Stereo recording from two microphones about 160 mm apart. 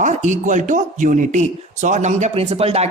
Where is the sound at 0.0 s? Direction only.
50° right (ahead or behind).